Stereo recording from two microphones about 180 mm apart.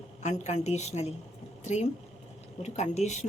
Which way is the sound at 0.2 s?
40° left (ahead or behind).